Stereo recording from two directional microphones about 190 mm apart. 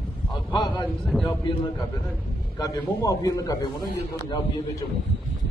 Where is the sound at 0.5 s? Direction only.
25° left (ahead or behind).